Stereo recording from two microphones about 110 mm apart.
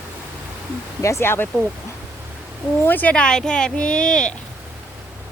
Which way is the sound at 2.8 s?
15° left (ahead or behind).